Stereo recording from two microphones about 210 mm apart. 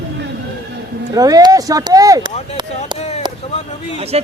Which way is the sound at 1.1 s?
20° right (ahead or behind).